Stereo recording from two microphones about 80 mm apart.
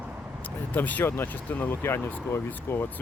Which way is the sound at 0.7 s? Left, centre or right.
Left.